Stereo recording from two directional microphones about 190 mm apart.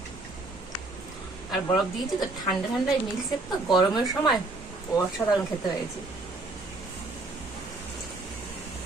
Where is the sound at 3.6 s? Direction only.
Centre (ahead or behind).